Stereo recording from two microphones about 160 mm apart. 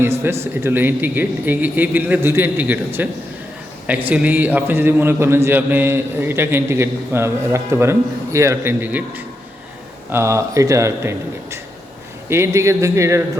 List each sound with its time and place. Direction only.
0.5 s a man's voice: 15° right (ahead or behind)
4.1 s a man's voice: 10° right (ahead or behind)